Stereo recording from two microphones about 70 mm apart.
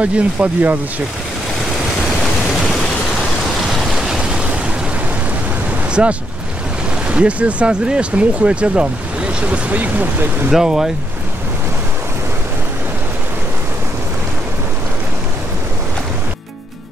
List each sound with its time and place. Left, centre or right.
0.0 s speech: right
3.7 s vehicle: centre
6.0 s speech: centre
10.5 s speech: centre